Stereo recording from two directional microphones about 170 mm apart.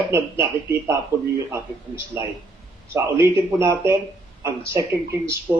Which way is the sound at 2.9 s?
15° right (ahead or behind).